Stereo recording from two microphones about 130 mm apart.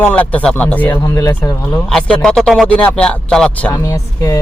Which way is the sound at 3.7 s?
25° left (ahead or behind).